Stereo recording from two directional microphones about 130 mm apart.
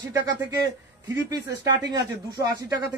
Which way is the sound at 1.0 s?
25° right (ahead or behind).